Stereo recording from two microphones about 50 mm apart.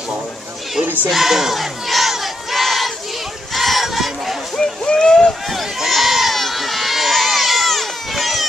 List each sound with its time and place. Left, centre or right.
1.0 s battle cry: centre
3.5 s crowd: centre
4.6 s a sound: centre
5.5 s run: centre